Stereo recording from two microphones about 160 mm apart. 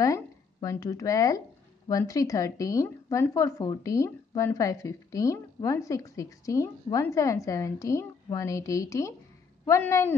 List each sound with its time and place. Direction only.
0.0 s a woman's voice: 20° left (ahead or behind)